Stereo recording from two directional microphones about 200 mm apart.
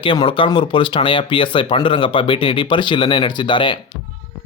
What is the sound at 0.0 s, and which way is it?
Speech, 25° left (ahead or behind).